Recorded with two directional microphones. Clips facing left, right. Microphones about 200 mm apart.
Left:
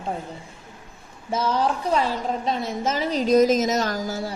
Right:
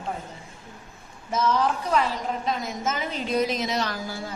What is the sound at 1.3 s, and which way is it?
A woman's voice, 30° left (ahead or behind).